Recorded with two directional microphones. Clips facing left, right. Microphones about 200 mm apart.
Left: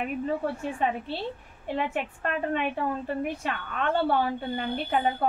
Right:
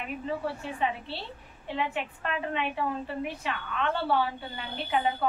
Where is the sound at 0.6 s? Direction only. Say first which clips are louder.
Left 3 dB; 45° left (ahead or behind).